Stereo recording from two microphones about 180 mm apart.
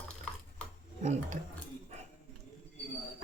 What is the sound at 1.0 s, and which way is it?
Speech, 40° right (ahead or behind).